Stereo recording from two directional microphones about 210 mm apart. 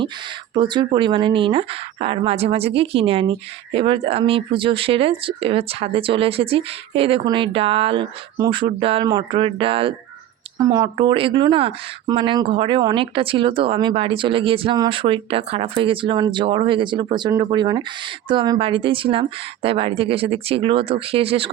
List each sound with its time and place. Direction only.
0.5 s speech: 20° right (ahead or behind)